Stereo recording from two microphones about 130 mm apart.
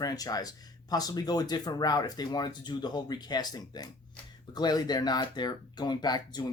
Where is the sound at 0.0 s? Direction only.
30° left (ahead or behind).